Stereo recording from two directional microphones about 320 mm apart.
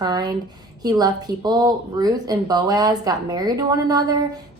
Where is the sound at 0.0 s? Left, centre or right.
Centre.